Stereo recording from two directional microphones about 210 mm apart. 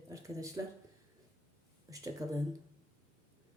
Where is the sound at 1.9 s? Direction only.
15° right (ahead or behind).